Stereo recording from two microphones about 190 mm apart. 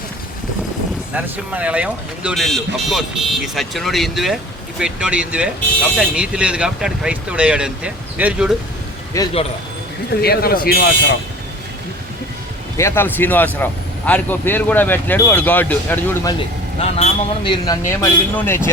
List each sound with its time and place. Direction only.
1.1 s speech: 5° right (ahead or behind)
9.2 s speech: 15° left (ahead or behind)
10.2 s speech: 55° left (ahead or behind)
12.7 s speech: 15° left (ahead or behind)
16.8 s speech: 30° left (ahead or behind); by 18.7 s 10° left (ahead or behind)